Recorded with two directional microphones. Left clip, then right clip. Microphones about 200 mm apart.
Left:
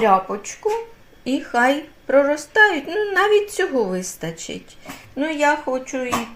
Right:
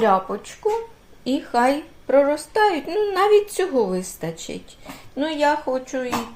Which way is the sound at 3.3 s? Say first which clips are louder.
Right 1 dB; 30° right (ahead or behind).